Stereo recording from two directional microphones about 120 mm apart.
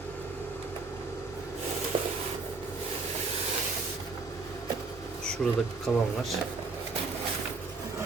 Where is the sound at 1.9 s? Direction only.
50° right (ahead or behind).